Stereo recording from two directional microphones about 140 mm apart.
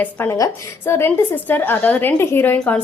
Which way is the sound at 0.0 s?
15° left (ahead or behind).